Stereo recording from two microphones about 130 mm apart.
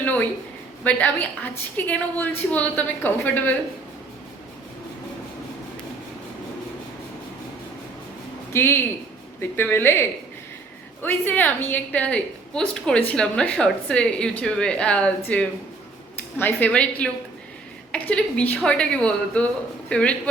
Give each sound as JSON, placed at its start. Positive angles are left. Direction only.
{"t": 0.0, "sound": "a sound", "side_deg": 10}
{"t": 0.9, "sound": "a woman's voice", "side_deg": 10}
{"t": 8.5, "sound": "a woman's voice", "side_deg": 20}